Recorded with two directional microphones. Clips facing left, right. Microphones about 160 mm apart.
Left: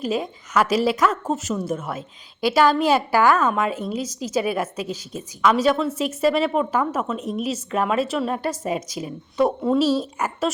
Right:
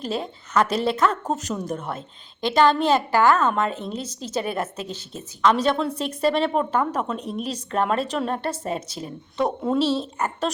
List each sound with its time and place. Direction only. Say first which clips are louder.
0.0 s a woman's voice: left 3 dB; 10° left (ahead or behind)